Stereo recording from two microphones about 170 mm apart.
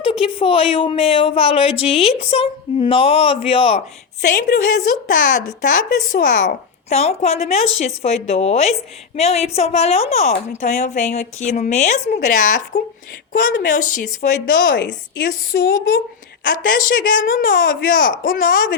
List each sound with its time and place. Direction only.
0.0 s a woman's voice: 35° left (ahead or behind)
4.3 s a woman's voice: 60° left (ahead or behind)
12.2 s a woman's voice: 55° left (ahead or behind)
14.2 s speech: 75° left (ahead or behind)
16.4 s a woman's voice: 55° left (ahead or behind)